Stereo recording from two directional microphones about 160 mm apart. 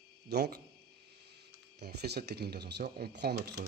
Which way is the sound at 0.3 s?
90° right.